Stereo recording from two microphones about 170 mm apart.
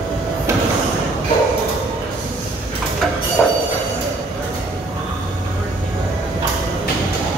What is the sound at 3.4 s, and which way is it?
Train, centre (ahead or behind).